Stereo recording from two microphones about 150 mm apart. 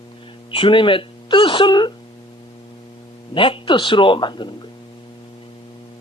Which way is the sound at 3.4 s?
35° left (ahead or behind).